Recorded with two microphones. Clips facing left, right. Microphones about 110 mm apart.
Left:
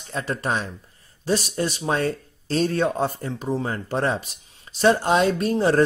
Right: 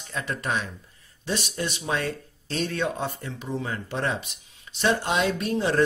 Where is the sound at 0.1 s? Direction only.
35° left (ahead or behind).